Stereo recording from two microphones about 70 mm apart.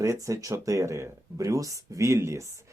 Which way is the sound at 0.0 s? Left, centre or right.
Right.